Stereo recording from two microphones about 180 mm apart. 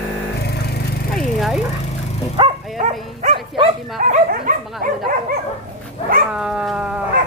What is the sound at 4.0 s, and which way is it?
Dog, 50° right (ahead or behind).